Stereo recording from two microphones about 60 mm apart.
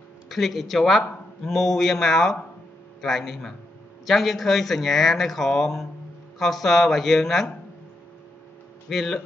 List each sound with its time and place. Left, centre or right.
0.3 s speech: centre
8.8 s speech: centre